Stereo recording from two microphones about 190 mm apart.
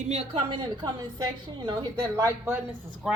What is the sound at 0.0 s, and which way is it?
A woman's voice, 35° right (ahead or behind).